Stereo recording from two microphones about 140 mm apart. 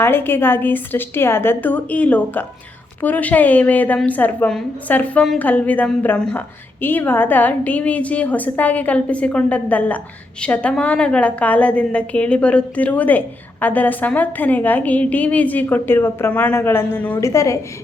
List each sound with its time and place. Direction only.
0.0 s a woman's voice: 15° left (ahead or behind)